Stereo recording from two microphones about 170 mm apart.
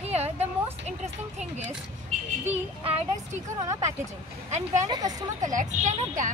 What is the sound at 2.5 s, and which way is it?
Child singing, 35° right (ahead or behind).